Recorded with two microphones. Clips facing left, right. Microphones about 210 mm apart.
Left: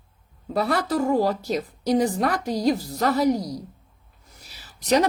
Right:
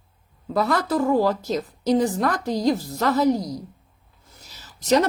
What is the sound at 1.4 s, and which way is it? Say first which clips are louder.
Speech: right 1 dB; 10° left (ahead or behind).